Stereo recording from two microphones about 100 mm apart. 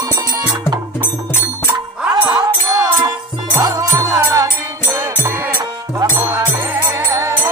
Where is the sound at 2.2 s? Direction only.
40° right (ahead or behind).